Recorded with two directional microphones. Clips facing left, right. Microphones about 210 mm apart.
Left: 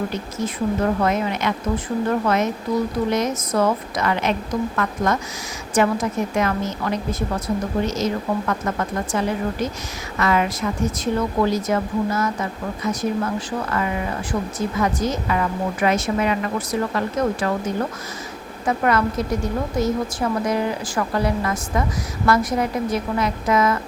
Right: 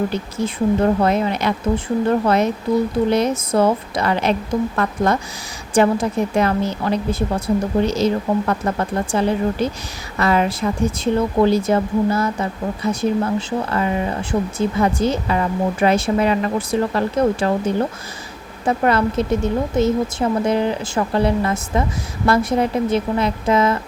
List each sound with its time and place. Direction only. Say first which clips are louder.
0.1 s speech: right 3 dB; 30° right (ahead or behind)
5.7 s speech: right 3 dB; 30° right (ahead or behind)